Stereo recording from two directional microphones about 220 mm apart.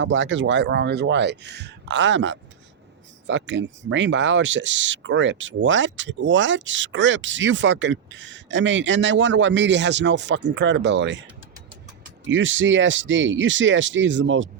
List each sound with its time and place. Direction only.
0.0 s speech: 55° right (ahead or behind)